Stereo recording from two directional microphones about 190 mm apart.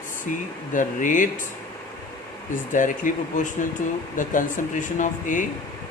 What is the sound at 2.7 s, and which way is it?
Speech, 40° left (ahead or behind).